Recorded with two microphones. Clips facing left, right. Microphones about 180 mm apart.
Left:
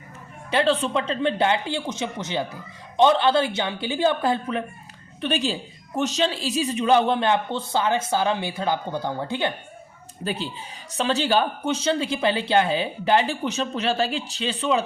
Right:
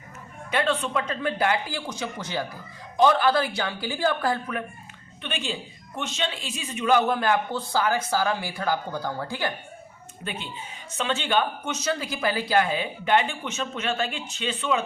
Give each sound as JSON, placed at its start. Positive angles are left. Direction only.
{"t": 0.5, "sound": "a man's voice", "side_deg": 30}
{"t": 5.2, "sound": "a man's voice", "side_deg": 35}
{"t": 10.2, "sound": "speech", "side_deg": 35}